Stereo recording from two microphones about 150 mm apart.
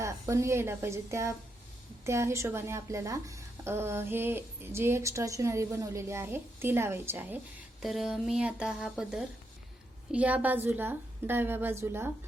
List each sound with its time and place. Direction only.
0.0 s a woman's voice: 20° right (ahead or behind)
7.8 s a woman's voice: centre (ahead or behind)